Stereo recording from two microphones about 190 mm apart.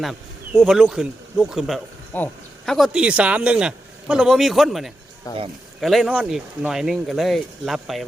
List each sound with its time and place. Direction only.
0.0 s speech: centre (ahead or behind)
5.3 s speech: 20° left (ahead or behind)
5.8 s speech: centre (ahead or behind)